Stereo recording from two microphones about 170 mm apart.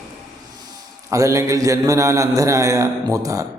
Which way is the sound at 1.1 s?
15° right (ahead or behind).